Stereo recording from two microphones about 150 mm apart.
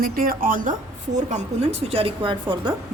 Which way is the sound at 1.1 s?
50° right (ahead or behind).